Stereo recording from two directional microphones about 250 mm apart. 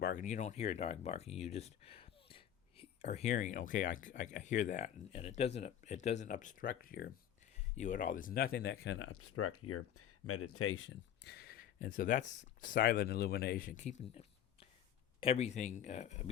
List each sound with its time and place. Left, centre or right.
0.0 s speech: left